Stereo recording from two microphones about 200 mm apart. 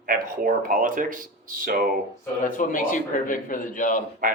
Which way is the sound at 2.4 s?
45° left (ahead or behind).